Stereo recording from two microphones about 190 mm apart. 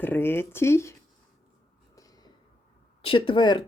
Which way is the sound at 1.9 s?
20° left (ahead or behind).